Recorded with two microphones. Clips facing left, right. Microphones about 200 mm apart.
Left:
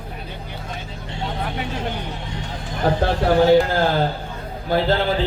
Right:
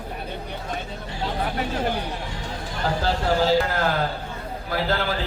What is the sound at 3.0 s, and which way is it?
Speech, 60° left (ahead or behind).